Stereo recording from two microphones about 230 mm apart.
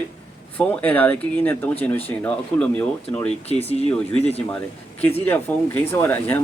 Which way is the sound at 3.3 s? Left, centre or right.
Left.